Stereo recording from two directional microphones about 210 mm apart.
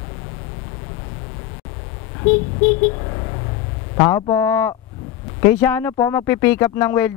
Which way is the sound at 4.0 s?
15° left (ahead or behind).